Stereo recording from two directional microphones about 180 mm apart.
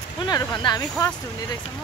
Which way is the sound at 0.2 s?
25° left (ahead or behind).